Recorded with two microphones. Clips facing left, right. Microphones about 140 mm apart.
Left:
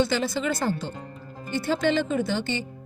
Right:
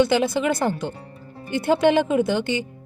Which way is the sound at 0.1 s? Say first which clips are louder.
Right 5 dB; 60° right (ahead or behind).